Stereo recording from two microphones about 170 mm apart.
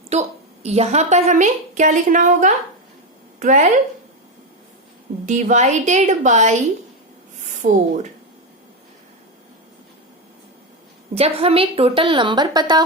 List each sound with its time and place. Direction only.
0.1 s a woman's voice: 40° right (ahead or behind)
5.2 s a woman's voice: 45° right (ahead or behind)
7.6 s a woman's voice: 45° right (ahead or behind)
11.1 s a woman's voice: 35° right (ahead or behind)